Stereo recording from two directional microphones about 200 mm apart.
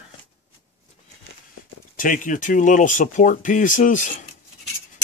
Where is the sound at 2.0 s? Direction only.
40° left (ahead or behind).